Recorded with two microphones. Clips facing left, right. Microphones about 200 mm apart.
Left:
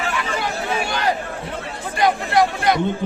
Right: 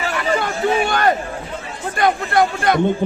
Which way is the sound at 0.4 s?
55° right (ahead or behind).